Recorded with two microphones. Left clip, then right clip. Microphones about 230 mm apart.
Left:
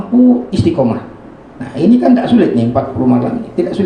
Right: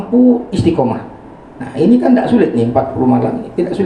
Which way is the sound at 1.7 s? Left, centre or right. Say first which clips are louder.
Even; left.